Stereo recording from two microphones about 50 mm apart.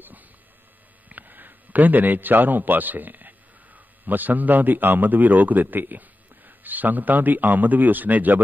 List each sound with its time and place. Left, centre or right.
1.0 s a man's voice: right